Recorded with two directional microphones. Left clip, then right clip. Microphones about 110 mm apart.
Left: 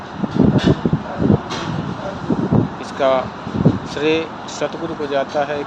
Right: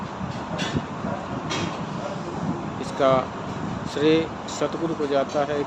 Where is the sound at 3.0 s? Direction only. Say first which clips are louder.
Left 4 dB; 30° right (ahead or behind).